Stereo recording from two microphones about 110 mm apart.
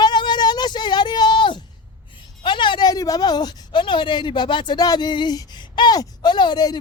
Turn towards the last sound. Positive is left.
turn(degrees=40)  # may be behind; listen again after turning